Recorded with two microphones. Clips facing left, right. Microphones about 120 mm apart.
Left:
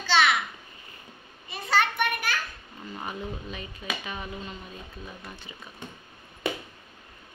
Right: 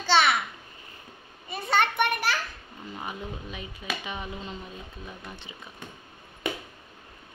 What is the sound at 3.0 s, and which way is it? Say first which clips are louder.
Speech: left 1 dB; 10° right (ahead or behind).